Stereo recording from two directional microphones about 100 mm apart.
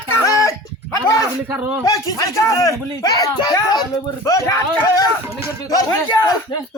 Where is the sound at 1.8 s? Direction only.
35° left (ahead or behind).